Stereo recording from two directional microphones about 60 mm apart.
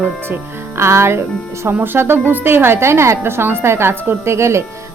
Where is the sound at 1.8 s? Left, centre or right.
Right.